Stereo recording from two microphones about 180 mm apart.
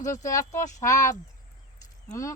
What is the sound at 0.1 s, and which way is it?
Speech, 20° left (ahead or behind).